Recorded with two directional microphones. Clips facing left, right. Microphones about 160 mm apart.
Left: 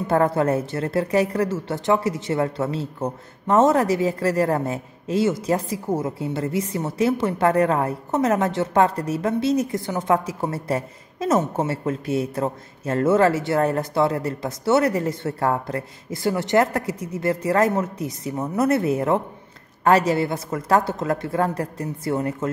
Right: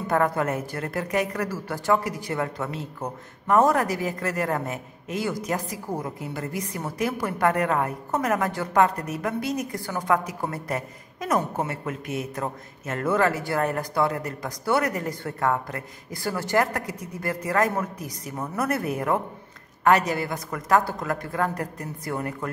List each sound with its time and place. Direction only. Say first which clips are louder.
0.0 s a woman's voice: left 4 dB; 30° left (ahead or behind)